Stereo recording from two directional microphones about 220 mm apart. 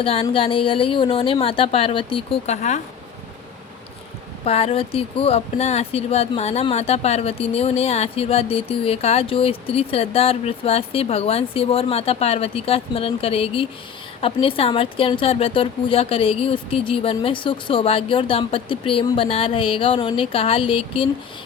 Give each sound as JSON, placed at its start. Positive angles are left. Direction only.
{"t": 0.0, "sound": "speech", "side_deg": 25}
{"t": 4.4, "sound": "speech", "side_deg": 25}